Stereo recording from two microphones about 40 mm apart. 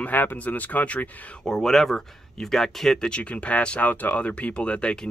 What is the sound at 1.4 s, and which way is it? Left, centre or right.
Speech, centre.